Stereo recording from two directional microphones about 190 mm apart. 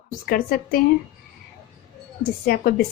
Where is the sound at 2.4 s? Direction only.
50° left (ahead or behind).